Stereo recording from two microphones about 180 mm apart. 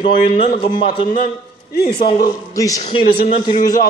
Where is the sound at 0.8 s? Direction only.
25° left (ahead or behind).